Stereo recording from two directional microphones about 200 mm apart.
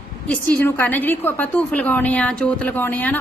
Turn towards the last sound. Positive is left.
turn(degrees=10)  # may be behind; listen again after turning